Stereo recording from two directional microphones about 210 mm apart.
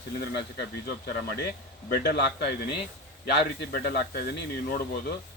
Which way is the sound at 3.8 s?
45° left (ahead or behind).